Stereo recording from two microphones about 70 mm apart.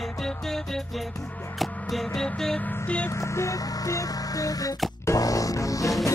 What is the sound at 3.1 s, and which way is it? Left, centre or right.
Music, left.